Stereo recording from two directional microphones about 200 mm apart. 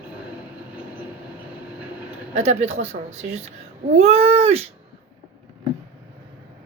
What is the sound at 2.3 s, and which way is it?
Speech, 35° right (ahead or behind).